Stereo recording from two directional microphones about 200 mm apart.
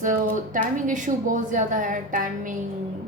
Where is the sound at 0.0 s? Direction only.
40° right (ahead or behind).